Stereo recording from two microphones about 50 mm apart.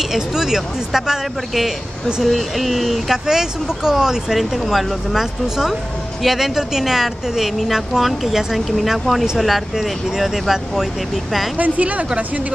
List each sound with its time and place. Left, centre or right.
0.0 s speech: centre
11.5 s speech: right